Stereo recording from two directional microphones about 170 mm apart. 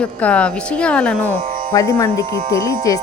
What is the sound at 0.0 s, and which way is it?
Speech, 5° left (ahead or behind).